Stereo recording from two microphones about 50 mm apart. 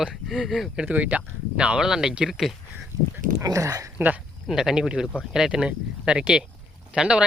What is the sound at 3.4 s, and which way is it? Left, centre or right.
Speech, right.